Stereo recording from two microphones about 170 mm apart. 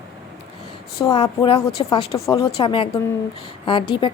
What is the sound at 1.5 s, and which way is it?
Speech, 35° left (ahead or behind).